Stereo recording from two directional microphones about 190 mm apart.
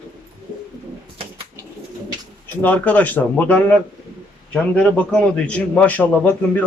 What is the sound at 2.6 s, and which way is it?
A man's voice, 10° left (ahead or behind).